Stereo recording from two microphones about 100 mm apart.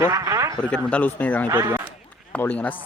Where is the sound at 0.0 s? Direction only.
35° right (ahead or behind).